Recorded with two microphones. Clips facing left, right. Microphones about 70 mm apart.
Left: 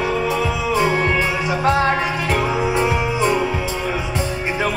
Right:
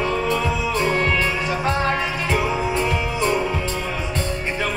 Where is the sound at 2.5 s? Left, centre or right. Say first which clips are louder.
Left 3 dB; centre.